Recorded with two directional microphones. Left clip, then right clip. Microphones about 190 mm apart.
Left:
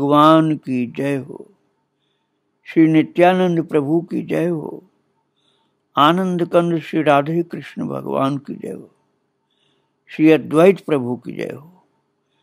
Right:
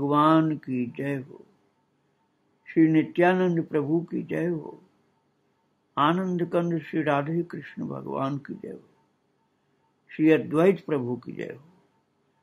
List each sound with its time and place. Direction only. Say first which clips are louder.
0.0 s a man's voice: left 9 dB; 50° left (ahead or behind)
2.6 s a man's voice: left 7 dB; 50° left (ahead or behind)
5.9 s a man's voice: left 9 dB; 50° left (ahead or behind)
10.0 s a man's voice: left 8 dB; 50° left (ahead or behind)